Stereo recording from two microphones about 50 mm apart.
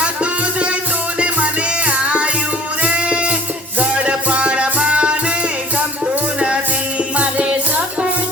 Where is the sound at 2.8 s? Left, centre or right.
Right.